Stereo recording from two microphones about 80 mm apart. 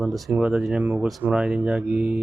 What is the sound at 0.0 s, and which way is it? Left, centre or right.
Speech, centre.